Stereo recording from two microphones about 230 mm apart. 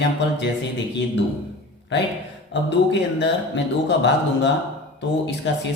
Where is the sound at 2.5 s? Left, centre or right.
Left.